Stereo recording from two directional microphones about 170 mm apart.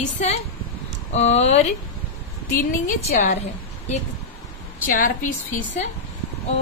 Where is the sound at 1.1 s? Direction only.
40° left (ahead or behind).